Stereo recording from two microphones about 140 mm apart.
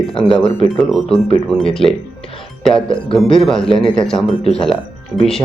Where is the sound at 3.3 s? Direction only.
5° left (ahead or behind).